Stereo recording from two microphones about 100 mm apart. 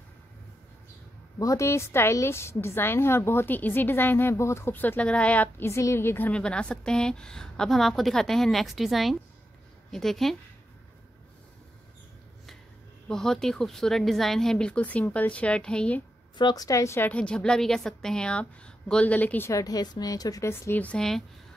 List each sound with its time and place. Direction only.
1.4 s a woman's voice: 30° left (ahead or behind); by 5.7 s 15° left (ahead or behind)
5.7 s a woman's voice: 30° left (ahead or behind); by 10.3 s 5° left (ahead or behind)
13.1 s a woman's voice: 5° left (ahead or behind)
16.3 s a woman's voice: 45° left (ahead or behind); by 17.1 s 25° left (ahead or behind)
17.1 s a woman's voice: 10° left (ahead or behind)
19.5 s a woman's voice: 40° left (ahead or behind)
20.8 s a woman's voice: 5° left (ahead or behind)